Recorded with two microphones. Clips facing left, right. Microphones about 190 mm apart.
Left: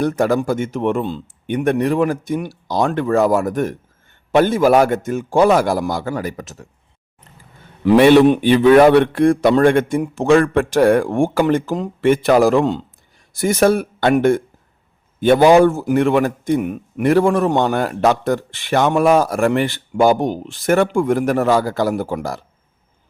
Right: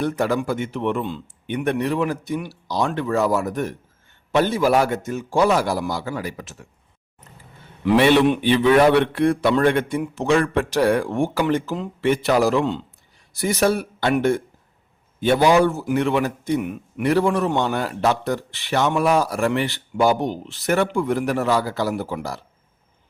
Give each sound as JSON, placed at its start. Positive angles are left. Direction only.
{"t": 0.0, "sound": "a man's voice", "side_deg": 45}
{"t": 7.9, "sound": "a man's voice", "side_deg": 50}